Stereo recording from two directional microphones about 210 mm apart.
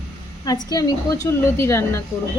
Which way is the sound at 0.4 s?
20° left (ahead or behind).